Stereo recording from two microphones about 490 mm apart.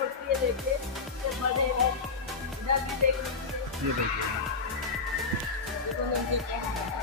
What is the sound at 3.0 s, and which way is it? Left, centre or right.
Music, right.